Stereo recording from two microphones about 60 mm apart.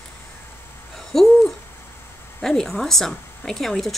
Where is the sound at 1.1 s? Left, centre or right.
Centre.